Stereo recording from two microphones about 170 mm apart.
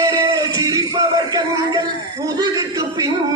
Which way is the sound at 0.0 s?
20° right (ahead or behind).